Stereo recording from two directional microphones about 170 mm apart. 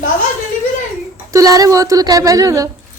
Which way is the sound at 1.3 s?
20° right (ahead or behind).